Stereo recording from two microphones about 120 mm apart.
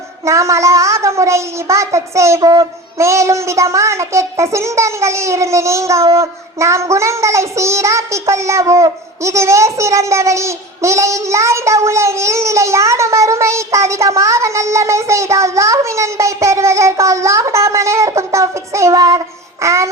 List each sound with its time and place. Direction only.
0.3 s a child's voice: 25° right (ahead or behind)